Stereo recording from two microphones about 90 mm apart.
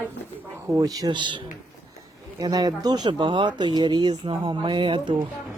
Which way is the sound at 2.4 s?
45° right (ahead or behind).